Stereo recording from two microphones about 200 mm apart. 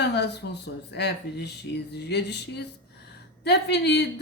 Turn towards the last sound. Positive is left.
turn(degrees=55)  # may be behind; listen again after turning